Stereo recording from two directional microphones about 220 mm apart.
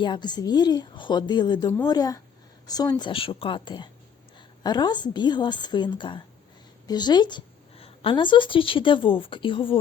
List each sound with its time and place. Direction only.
0.0 s a woman's voice: 20° left (ahead or behind)